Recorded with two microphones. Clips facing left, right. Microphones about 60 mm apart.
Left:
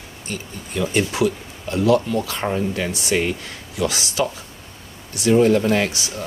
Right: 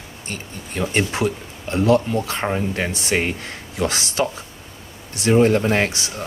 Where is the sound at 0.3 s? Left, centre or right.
Right.